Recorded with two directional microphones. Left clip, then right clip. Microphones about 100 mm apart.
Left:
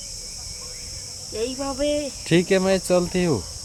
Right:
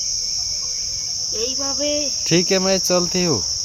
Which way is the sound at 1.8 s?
35° left (ahead or behind).